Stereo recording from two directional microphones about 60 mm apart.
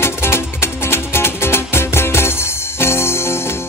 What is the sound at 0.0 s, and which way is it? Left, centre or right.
Music, left.